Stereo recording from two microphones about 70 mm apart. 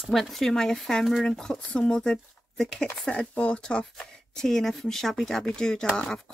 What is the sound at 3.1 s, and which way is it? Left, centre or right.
Speech, centre.